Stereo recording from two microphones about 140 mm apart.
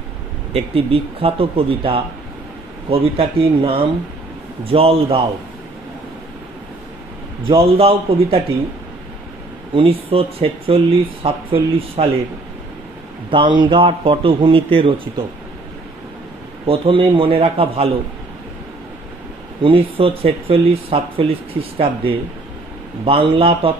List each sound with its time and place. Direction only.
0.5 s speech: 45° right (ahead or behind)
7.4 s speech: 40° right (ahead or behind)
9.8 s speech: 40° right (ahead or behind)
13.3 s speech: 35° right (ahead or behind)
16.6 s speech: 40° right (ahead or behind)
19.6 s speech: 40° right (ahead or behind)